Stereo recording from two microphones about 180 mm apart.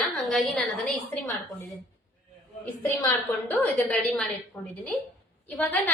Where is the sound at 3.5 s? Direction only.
10° left (ahead or behind).